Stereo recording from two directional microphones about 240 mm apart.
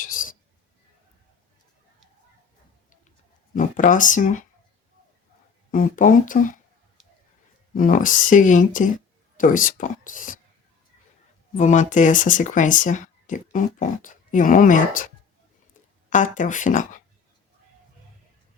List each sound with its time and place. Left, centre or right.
0.0 s a sound: left
3.5 s speech: left
5.7 s speech: left
7.8 s speech: left
11.5 s speech: left
16.0 s speech: left